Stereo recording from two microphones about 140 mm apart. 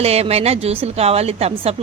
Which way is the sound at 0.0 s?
50° right (ahead or behind).